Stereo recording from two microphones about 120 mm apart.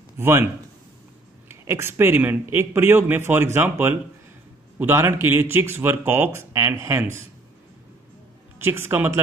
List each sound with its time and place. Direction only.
0.2 s a man's voice: 20° right (ahead or behind)
1.5 s a man's voice: 20° right (ahead or behind)
8.5 s a man's voice: 20° right (ahead or behind)